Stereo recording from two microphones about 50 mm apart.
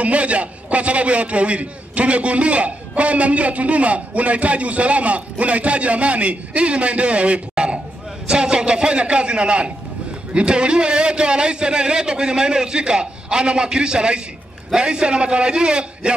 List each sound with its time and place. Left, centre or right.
0.0 s a man's voice: right